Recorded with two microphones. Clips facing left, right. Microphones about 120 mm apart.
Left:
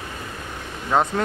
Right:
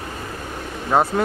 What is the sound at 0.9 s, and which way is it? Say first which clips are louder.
Speech: right 2 dB; 10° right (ahead or behind).